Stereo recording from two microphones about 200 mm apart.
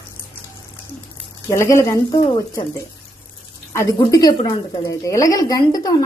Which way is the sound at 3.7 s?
15° left (ahead or behind).